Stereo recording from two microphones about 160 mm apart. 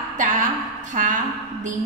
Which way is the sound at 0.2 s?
55° right (ahead or behind).